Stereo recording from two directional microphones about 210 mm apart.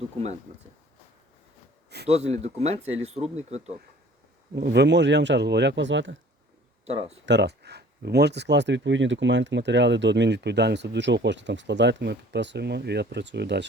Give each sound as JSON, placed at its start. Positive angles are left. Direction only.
{"t": 2.0, "sound": "speech", "side_deg": -30}
{"t": 4.5, "sound": "speech", "side_deg": -55}
{"t": 6.8, "sound": "speech", "side_deg": -30}
{"t": 7.3, "sound": "speech", "side_deg": -55}